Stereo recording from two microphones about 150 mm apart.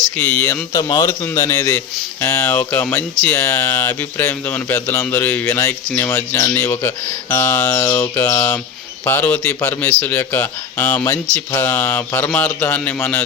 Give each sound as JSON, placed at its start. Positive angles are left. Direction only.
{"t": 0.2, "sound": "speech", "side_deg": 15}
{"t": 0.8, "sound": "a man's voice", "side_deg": 25}